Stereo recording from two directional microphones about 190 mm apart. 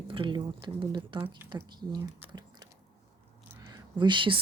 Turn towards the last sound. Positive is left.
turn(degrees=-25)  # may be behind; listen again after turning